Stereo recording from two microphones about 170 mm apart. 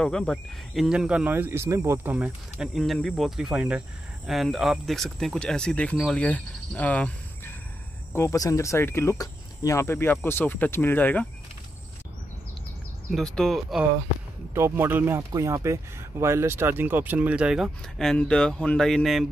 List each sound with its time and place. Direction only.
0.0 s speech: 5° left (ahead or behind)
13.1 s speech: centre (ahead or behind)
14.5 s speech: 15° right (ahead or behind); by 19.2 s centre (ahead or behind)